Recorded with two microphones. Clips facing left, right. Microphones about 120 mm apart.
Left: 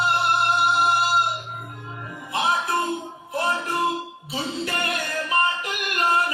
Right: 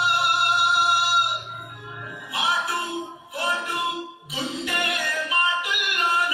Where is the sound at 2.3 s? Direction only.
40° left (ahead or behind).